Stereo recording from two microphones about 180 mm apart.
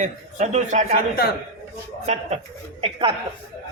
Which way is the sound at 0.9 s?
55° left (ahead or behind).